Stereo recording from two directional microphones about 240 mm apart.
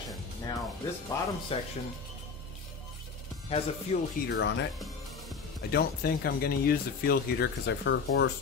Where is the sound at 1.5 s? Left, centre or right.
Left.